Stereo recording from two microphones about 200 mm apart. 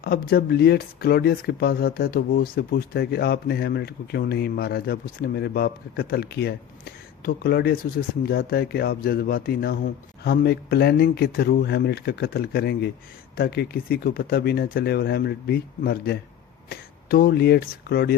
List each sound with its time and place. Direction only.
0.0 s speech: 50° left (ahead or behind)